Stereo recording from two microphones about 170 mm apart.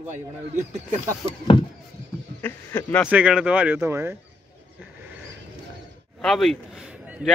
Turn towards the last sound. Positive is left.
turn(degrees=-5)  # may be behind; listen again after turning